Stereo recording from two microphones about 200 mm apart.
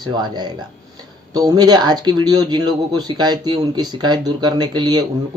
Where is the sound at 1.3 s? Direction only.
20° right (ahead or behind).